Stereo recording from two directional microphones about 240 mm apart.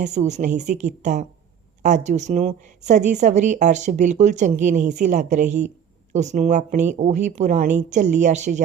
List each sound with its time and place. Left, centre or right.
0.0 s speech: right